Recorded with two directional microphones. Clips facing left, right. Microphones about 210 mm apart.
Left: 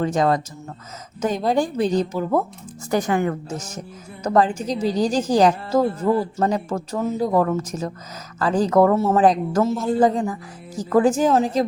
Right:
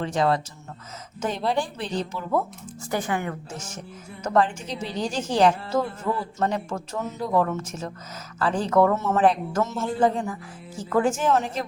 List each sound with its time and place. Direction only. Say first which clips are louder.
0.0 s a woman's voice: left 4 dB; 45° left (ahead or behind)